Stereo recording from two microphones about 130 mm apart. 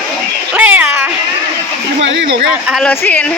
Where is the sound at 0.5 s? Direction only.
10° right (ahead or behind).